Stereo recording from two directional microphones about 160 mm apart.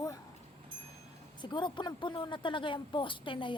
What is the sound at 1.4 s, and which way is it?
A woman's voice, 30° left (ahead or behind).